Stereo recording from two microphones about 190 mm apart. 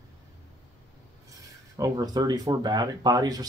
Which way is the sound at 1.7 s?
20° right (ahead or behind).